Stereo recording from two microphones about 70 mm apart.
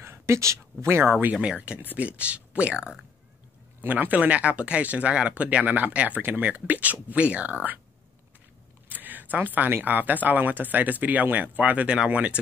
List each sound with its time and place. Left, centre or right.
0.0 s speech: right
1.3 s speech: centre
1.6 s speech: right
8.8 s speech: right